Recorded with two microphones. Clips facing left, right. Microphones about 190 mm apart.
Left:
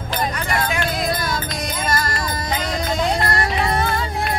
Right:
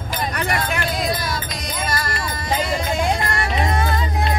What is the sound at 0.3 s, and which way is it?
Music, 60° right (ahead or behind).